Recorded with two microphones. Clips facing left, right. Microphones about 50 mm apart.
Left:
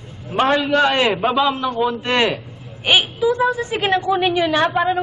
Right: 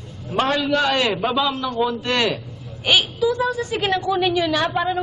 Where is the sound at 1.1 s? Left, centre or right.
Centre.